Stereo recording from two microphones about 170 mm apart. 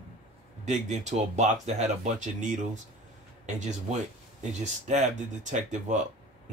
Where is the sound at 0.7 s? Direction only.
45° right (ahead or behind).